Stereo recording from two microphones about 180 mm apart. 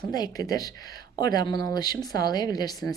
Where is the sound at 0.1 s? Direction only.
20° left (ahead or behind).